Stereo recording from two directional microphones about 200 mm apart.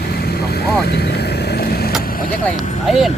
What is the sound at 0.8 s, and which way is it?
Vehicle, 55° left (ahead or behind).